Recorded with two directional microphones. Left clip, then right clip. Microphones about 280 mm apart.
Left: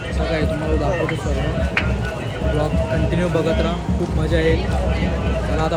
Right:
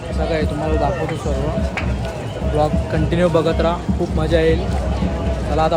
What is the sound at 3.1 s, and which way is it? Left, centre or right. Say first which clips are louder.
Speech: right 7 dB; centre.